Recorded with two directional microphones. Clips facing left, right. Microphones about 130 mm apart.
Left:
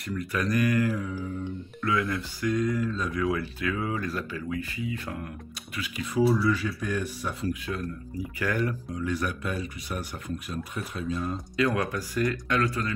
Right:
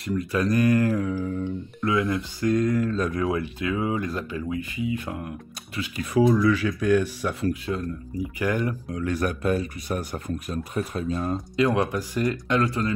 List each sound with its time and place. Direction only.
0.0 s speech: 25° right (ahead or behind); by 1.5 s 50° right (ahead or behind)
1.8 s speech: 25° right (ahead or behind)
2.4 s speech: 40° right (ahead or behind)
3.2 s speech: 25° right (ahead or behind)
6.4 s speech: 90° right
7.6 s speech: 25° right (ahead or behind)
9.0 s speech: 50° right (ahead or behind)
11.5 s speech: 25° right (ahead or behind)